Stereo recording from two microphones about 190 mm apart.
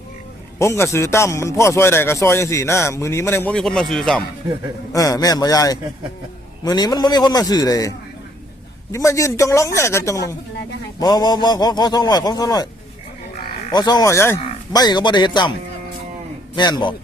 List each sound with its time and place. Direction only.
0.6 s a man's voice: 15° left (ahead or behind)
4.9 s a man's voice: 15° left (ahead or behind)
13.7 s speech: 20° left (ahead or behind)
16.6 s speech: 25° left (ahead or behind)